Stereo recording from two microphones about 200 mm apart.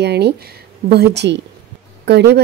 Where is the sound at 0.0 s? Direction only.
55° right (ahead or behind).